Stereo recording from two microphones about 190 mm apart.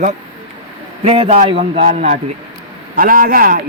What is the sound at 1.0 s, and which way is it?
A man's voice, 30° right (ahead or behind).